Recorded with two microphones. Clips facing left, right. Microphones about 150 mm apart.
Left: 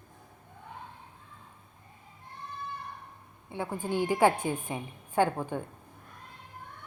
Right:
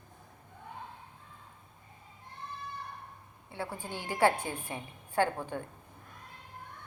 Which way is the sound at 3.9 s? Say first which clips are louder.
Left 4 dB; 15° left (ahead or behind).